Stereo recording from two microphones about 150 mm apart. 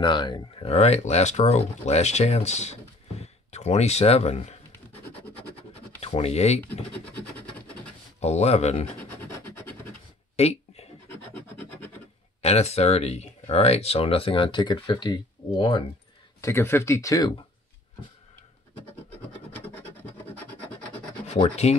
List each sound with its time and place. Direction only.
0.0 s speech: 30° left (ahead or behind)
0.7 s speech: 45° left (ahead or behind)
6.0 s speech: 45° left (ahead or behind)
8.2 s speech: 45° left (ahead or behind)
9.2 s a sound: 15° left (ahead or behind)
10.3 s a sound: 45° left (ahead or behind)
12.4 s speech: 45° left (ahead or behind)
16.3 s speech: 20° left (ahead or behind)
21.6 s speech: 45° left (ahead or behind)